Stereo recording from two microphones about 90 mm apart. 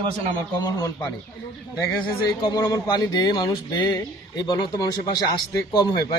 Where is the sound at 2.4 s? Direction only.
50° left (ahead or behind).